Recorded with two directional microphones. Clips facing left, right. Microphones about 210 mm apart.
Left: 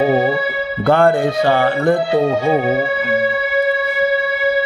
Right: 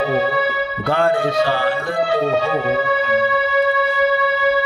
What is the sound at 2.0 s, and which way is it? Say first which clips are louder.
Speech: left 3 dB; 25° left (ahead or behind).